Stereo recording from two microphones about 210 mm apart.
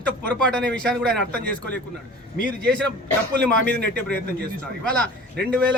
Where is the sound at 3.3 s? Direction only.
50° right (ahead or behind).